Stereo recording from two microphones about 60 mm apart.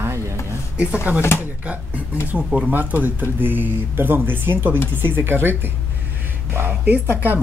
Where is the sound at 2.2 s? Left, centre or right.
Centre.